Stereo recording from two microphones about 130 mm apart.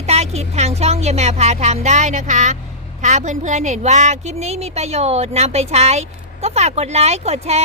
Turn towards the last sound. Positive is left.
turn(degrees=-55)  # may be behind; listen again after turning